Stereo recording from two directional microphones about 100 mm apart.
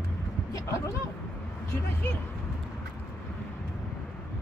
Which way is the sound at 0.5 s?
35° left (ahead or behind).